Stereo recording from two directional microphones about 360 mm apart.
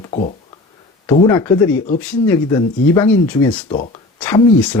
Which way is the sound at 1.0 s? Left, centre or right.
Centre.